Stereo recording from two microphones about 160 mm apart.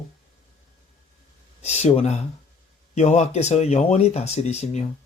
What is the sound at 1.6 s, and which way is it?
Speech, 45° left (ahead or behind).